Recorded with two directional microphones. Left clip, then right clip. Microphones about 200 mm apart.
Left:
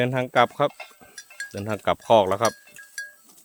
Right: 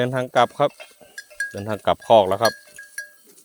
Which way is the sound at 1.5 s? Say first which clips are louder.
Right 2 dB; 10° left (ahead or behind).